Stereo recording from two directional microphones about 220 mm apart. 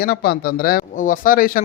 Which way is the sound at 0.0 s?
45° left (ahead or behind).